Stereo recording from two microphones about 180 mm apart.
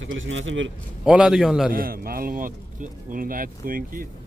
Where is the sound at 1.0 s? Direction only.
5° right (ahead or behind).